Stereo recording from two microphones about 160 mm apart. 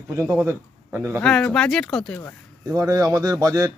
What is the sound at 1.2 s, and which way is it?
Speech, 5° left (ahead or behind).